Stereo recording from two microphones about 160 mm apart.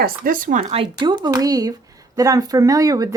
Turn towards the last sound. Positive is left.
turn(degrees=-20)  # may be behind; listen again after turning